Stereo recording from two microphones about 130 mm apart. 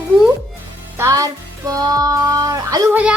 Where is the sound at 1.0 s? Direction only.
25° right (ahead or behind).